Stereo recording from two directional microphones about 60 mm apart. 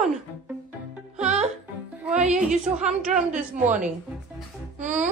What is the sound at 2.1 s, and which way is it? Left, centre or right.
A woman's voice, centre.